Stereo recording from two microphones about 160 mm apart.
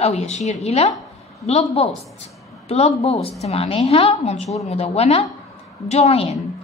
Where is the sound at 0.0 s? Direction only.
40° left (ahead or behind).